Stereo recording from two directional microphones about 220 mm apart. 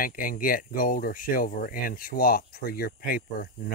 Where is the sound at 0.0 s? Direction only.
40° left (ahead or behind).